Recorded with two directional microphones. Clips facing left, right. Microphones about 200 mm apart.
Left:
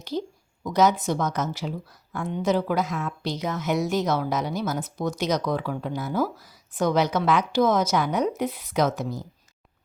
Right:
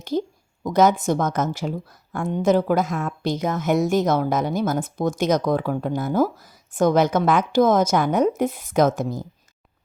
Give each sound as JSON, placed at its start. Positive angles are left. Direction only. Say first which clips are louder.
{"t": 0.6, "sound": "a woman's voice", "louder": "right 3 dB", "side_deg": -50}